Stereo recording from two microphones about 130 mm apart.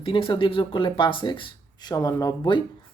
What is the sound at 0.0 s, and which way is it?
Speech, 40° left (ahead or behind).